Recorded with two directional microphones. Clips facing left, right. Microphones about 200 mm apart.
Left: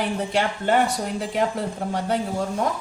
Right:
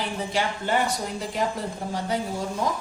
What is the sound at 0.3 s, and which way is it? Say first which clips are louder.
Speech: left 4 dB; 60° left (ahead or behind).